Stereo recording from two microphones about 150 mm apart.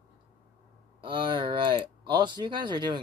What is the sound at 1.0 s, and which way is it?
A man's voice, 35° right (ahead or behind).